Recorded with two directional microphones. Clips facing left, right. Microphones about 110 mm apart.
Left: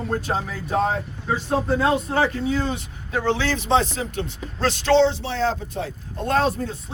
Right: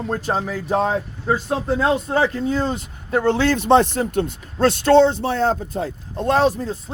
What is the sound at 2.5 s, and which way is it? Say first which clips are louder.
Speech: right 2 dB; 30° right (ahead or behind).